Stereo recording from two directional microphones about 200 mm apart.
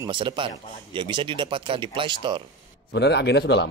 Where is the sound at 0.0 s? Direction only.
20° right (ahead or behind).